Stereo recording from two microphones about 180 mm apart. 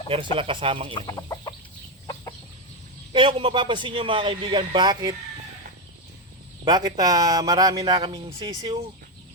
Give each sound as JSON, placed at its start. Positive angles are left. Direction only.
{"t": 0.1, "sound": "speech", "side_deg": -30}
{"t": 0.9, "sound": "chicken", "side_deg": 25}
{"t": 3.1, "sound": "a man's voice", "side_deg": -30}
{"t": 6.7, "sound": "a man's voice", "side_deg": -20}